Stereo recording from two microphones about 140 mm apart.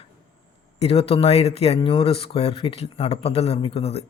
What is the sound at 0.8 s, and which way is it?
Speech, 45° left (ahead or behind).